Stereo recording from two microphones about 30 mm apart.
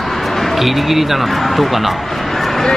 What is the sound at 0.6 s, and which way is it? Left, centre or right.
Speech, centre.